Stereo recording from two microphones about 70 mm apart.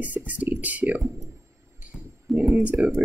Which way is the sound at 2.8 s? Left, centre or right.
Right.